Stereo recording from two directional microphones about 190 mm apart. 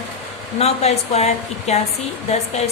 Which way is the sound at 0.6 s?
35° left (ahead or behind).